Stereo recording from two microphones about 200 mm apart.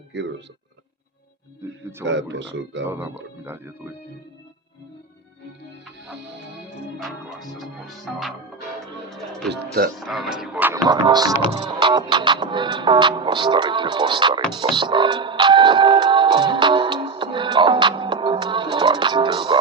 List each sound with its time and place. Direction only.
0.1 s speech: 60° right (ahead or behind)
1.8 s speech: 10° right (ahead or behind)
2.0 s speech: 65° right (ahead or behind)
2.8 s speech: 10° right (ahead or behind)
7.0 s speech: centre (ahead or behind)
9.0 s music: centre (ahead or behind)
10.0 s speech: centre (ahead or behind); by 14.4 s 25° right (ahead or behind)
14.8 s music: 25° right (ahead or behind)